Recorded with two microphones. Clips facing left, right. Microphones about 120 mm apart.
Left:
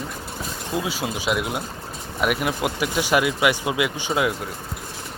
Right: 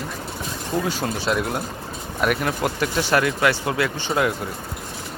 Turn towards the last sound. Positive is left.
turn(degrees=5)  # may be behind; listen again after turning